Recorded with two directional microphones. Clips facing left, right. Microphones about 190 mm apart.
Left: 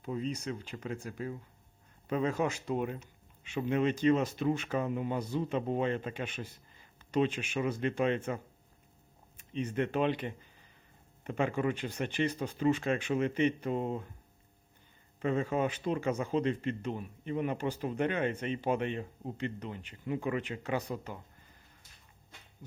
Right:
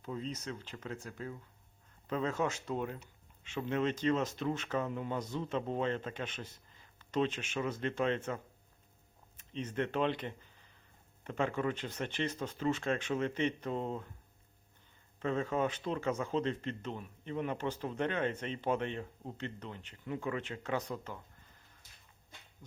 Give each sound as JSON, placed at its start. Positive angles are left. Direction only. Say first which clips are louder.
{"t": 0.0, "sound": "speech", "louder": "left 5 dB", "side_deg": 10}
{"t": 9.4, "sound": "speech", "louder": "left 3 dB", "side_deg": 10}
{"t": 15.2, "sound": "speech", "louder": "left 2 dB", "side_deg": 10}